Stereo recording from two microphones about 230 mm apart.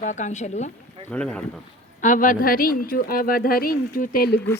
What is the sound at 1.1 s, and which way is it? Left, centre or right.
Speech, centre.